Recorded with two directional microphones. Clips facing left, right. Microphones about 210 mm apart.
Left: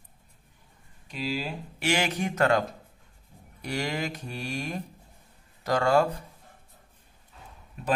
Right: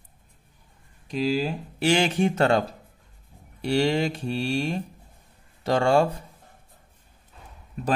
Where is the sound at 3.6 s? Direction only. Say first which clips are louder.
Right 8 dB; 30° right (ahead or behind).